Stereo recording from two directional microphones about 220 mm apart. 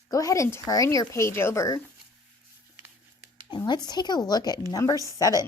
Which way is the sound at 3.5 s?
20° left (ahead or behind).